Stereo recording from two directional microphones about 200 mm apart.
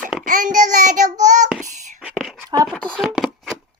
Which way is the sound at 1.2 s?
35° right (ahead or behind).